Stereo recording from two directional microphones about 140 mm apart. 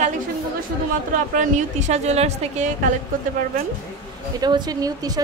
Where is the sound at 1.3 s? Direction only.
60° right (ahead or behind).